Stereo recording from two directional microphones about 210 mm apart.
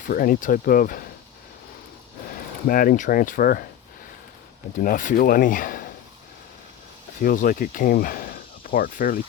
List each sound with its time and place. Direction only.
0.0 s speech: 40° left (ahead or behind)
2.6 s speech: 45° left (ahead or behind)
4.8 s speech: 40° left (ahead or behind)
7.2 s speech: 40° left (ahead or behind)